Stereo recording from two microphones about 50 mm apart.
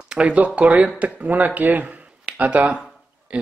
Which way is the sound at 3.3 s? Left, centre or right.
Right.